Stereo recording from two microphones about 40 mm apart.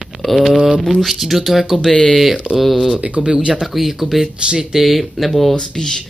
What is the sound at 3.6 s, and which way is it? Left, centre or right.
Speech, centre.